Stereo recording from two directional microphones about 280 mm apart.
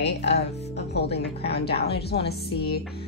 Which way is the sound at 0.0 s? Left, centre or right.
Left.